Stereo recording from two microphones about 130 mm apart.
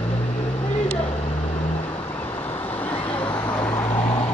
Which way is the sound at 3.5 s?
15° left (ahead or behind).